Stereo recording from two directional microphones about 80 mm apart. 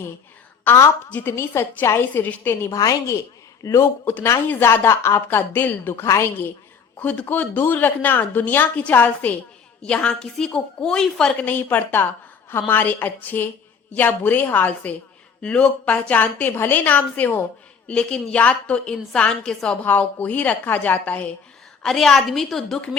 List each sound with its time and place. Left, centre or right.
1.1 s speech: left
2.7 s a woman's voice: left
4.4 s a woman's voice: left
7.0 s a woman's voice: left; by 11.3 s centre
11.4 s a woman's voice: left
21.8 s a woman's voice: centre